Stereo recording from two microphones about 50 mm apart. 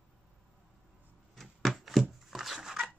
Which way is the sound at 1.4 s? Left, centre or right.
Centre.